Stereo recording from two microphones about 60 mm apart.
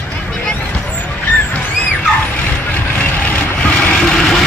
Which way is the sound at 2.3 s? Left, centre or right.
Left.